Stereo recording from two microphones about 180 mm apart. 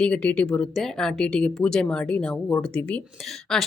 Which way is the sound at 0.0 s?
5° left (ahead or behind).